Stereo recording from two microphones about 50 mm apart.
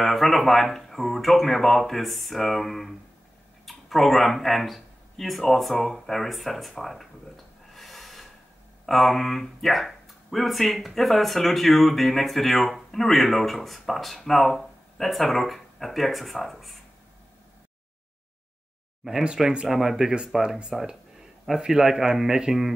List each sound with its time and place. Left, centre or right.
0.0 s speech: centre
7.7 s snort: centre
8.8 s speech: centre
19.2 s a man's voice: centre